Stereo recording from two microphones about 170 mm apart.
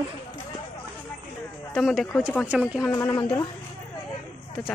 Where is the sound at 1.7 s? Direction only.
Centre (ahead or behind).